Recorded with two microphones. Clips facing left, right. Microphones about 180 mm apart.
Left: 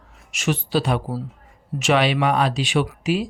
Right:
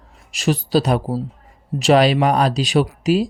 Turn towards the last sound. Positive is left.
turn(degrees=-40)  # may be behind; listen again after turning